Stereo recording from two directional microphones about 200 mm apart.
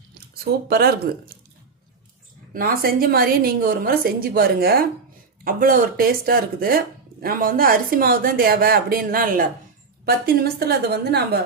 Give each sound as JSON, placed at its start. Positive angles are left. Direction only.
{"t": 0.7, "sound": "speech", "side_deg": -50}
{"t": 2.5, "sound": "speech", "side_deg": -45}